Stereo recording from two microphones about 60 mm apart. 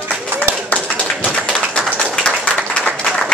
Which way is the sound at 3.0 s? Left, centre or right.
Centre.